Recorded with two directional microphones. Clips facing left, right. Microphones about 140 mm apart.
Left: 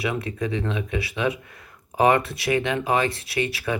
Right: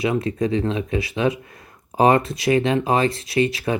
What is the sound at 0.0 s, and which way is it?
Speech, 30° right (ahead or behind).